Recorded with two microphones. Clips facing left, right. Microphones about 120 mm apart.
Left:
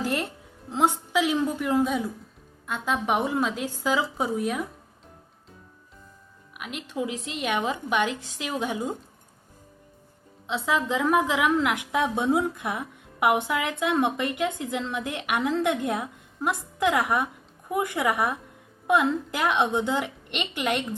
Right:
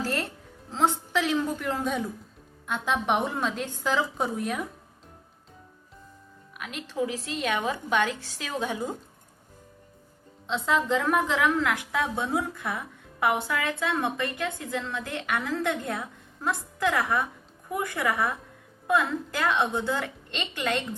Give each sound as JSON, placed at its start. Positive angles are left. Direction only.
{"t": 0.0, "sound": "music", "side_deg": 15}
{"t": 0.7, "sound": "a woman's voice", "side_deg": 15}
{"t": 6.6, "sound": "a woman's voice", "side_deg": 5}
{"t": 10.4, "sound": "a woman's voice", "side_deg": 5}